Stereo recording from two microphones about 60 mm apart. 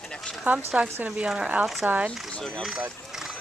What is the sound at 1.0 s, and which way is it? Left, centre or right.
Speech, right.